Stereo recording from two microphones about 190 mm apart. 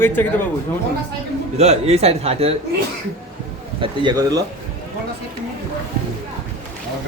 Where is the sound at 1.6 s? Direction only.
35° right (ahead or behind).